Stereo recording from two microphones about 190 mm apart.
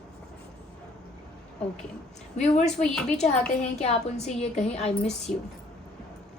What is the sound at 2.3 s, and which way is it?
Speech, 35° left (ahead or behind).